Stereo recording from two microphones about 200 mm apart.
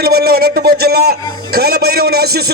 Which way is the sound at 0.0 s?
50° right (ahead or behind).